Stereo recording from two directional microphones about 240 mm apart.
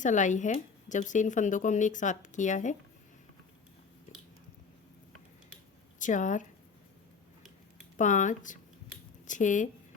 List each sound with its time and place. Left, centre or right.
0.0 s speech: left
6.0 s speech: left
7.9 s speech: left